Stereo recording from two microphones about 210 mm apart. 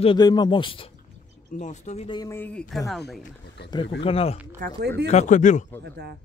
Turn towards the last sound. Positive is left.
turn(degrees=35)  # may be behind; listen again after turning